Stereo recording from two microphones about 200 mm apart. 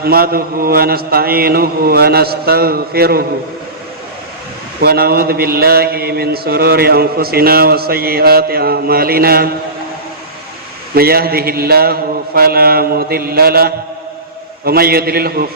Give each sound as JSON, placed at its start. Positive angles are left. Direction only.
{"t": 0.0, "sound": "mantra", "side_deg": -50}
{"t": 4.8, "sound": "mantra", "side_deg": -50}
{"t": 10.9, "sound": "mantra", "side_deg": -50}